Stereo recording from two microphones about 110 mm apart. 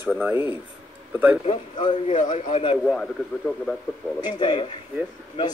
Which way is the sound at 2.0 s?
90° left.